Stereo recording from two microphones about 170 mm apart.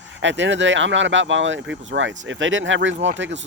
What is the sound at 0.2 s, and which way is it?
Speech, 90° right.